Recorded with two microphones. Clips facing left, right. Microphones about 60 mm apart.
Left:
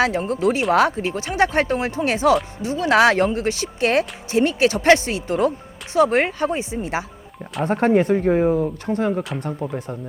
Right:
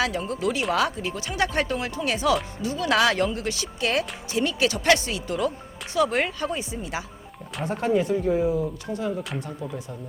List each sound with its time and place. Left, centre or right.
0.0 s speech: left
7.6 s speech: left